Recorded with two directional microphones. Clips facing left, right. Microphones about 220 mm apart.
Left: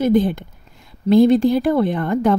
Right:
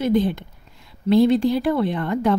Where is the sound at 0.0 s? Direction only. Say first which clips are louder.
Left 3 dB; 50° left (ahead or behind).